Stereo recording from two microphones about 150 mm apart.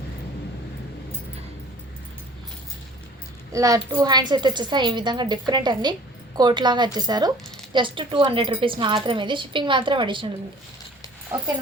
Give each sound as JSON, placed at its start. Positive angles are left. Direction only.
{"t": 3.5, "sound": "a child's voice", "side_deg": -25}